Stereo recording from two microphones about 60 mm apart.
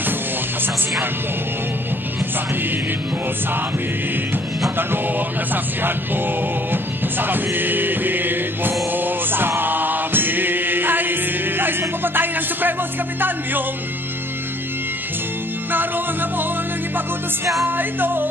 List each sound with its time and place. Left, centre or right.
5.5 s music: right
15.7 s music: right
17.6 s music: right